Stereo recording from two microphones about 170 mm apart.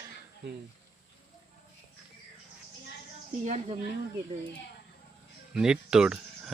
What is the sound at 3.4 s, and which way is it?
Speech, 40° right (ahead or behind).